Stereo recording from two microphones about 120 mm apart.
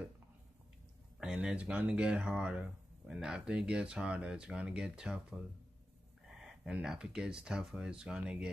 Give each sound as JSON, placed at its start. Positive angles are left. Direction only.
{"t": 1.2, "sound": "speech", "side_deg": -10}
{"t": 6.3, "sound": "speech", "side_deg": -5}